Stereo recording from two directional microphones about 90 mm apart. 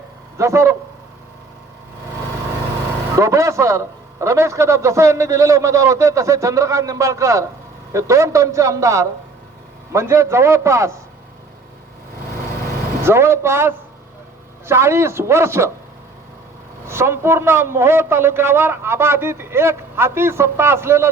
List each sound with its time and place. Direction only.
0.3 s a man's voice: 35° right (ahead or behind)
3.2 s a man's voice: 35° right (ahead or behind)
13.1 s a man's voice: 30° right (ahead or behind)
16.8 s a man's voice: 30° right (ahead or behind)